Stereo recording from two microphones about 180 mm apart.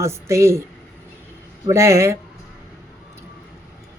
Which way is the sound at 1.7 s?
15° right (ahead or behind).